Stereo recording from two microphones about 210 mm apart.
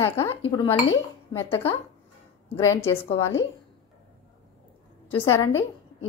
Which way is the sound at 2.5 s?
15° left (ahead or behind).